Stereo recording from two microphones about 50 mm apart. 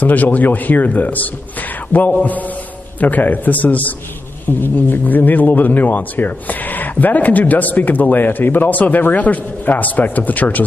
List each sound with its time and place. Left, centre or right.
0.0 s speech: left